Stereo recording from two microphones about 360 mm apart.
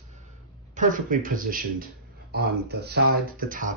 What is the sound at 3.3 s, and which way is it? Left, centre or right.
Speech, right.